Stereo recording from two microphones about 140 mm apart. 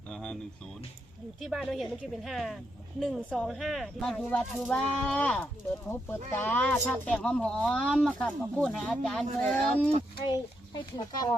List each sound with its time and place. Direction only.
0.1 s a sound: 5° left (ahead or behind)
1.4 s speech: centre (ahead or behind)
10.2 s speech: 35° left (ahead or behind)